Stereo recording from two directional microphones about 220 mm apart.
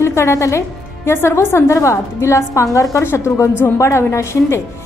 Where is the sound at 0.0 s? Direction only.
10° left (ahead or behind).